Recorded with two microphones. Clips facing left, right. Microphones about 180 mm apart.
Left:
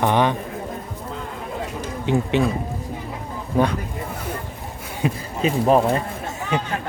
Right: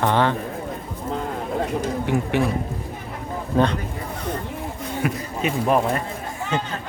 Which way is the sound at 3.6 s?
15° left (ahead or behind).